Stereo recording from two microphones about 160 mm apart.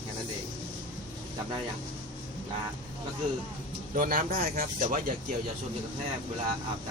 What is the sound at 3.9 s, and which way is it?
Speech, 60° right (ahead or behind).